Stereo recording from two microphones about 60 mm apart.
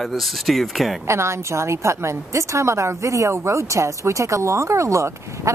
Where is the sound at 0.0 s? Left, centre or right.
Centre.